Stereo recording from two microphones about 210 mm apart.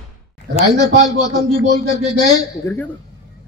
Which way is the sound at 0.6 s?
15° left (ahead or behind).